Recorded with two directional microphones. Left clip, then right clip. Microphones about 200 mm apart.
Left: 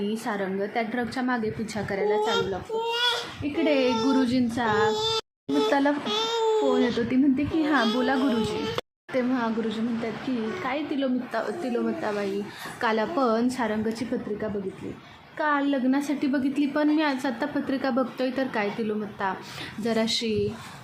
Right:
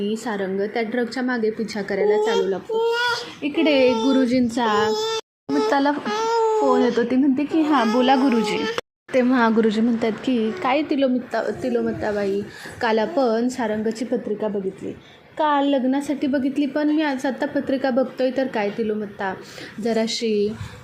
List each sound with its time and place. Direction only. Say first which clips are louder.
0.0 s a woman's voice: right 4 dB; 10° right (ahead or behind)
3.8 s speech: right 6 dB; 10° right (ahead or behind)
5.7 s a child's voice: right 4 dB; 5° left (ahead or behind)
6.1 s baby cry: right 7 dB; 5° right (ahead or behind)
7.3 s a woman's voice: right 5 dB; 10° right (ahead or behind)
9.3 s a woman's voice: right 9 dB; 40° right (ahead or behind)
10.6 s a woman's voice: right 9 dB; 30° right (ahead or behind); by 14.1 s 10° right (ahead or behind)
15.4 s a woman's voice: right 6 dB; 10° right (ahead or behind)